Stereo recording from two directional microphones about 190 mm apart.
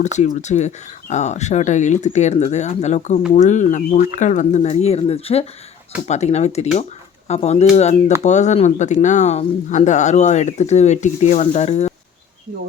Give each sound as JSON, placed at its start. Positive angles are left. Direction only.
{"t": 0.0, "sound": "speech", "side_deg": 40}